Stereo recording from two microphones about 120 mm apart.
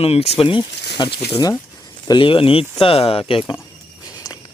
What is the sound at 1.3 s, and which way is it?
Speech, 30° left (ahead or behind).